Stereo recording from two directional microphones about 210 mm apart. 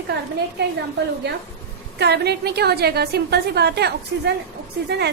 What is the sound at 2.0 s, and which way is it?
A woman's voice, 50° right (ahead or behind).